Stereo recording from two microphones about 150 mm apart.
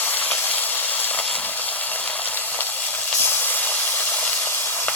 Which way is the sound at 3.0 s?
15° left (ahead or behind).